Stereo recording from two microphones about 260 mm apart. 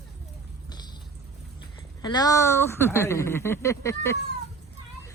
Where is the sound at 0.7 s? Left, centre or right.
Centre.